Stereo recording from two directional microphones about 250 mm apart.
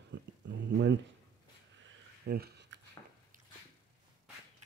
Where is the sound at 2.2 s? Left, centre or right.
Right.